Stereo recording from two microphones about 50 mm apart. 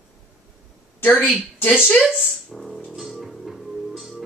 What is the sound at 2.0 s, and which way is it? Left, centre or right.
Music, centre.